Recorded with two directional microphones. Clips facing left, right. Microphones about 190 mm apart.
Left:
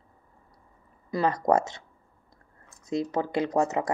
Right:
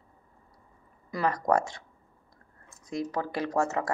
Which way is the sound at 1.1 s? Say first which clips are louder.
Left 3 dB; 25° left (ahead or behind).